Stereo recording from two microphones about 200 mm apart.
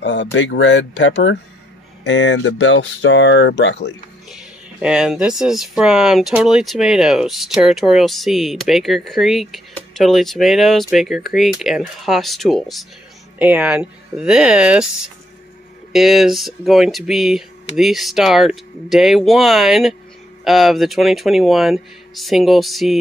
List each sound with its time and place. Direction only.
0.0 s speech: 65° left (ahead or behind)
4.3 s speech: 5° right (ahead or behind)